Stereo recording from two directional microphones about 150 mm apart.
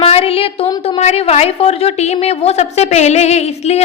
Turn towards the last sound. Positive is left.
turn(degrees=45)  # may be behind; listen again after turning